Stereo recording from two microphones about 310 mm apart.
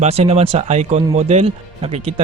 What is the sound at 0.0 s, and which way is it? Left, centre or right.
A man's voice, centre.